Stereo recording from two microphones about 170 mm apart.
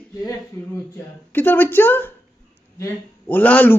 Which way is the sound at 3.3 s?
10° left (ahead or behind).